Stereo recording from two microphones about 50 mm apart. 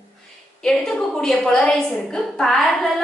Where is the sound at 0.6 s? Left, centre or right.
Centre.